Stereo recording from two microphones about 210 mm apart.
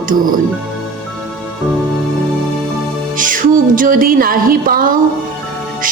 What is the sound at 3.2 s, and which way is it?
Music, 40° right (ahead or behind).